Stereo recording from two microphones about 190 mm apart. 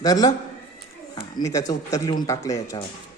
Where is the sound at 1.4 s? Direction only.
20° left (ahead or behind).